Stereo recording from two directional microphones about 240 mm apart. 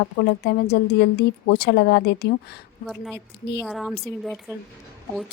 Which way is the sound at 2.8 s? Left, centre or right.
Centre.